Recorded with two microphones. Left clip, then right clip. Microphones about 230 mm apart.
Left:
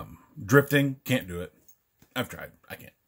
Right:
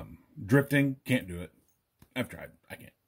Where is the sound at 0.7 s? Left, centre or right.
Centre.